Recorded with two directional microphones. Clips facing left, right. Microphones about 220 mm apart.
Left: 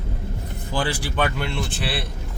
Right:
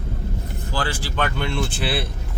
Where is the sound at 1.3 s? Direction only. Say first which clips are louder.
Right 2 dB; centre (ahead or behind).